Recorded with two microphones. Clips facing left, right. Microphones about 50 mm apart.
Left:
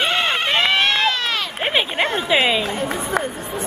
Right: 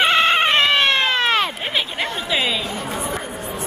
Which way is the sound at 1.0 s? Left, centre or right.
Right.